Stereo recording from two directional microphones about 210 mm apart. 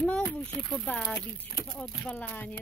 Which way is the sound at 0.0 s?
5° left (ahead or behind).